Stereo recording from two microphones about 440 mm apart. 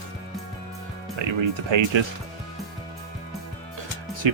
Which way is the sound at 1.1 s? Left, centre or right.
Right.